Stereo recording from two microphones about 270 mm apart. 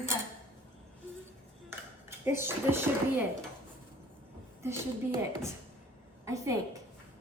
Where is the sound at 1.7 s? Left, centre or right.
Centre.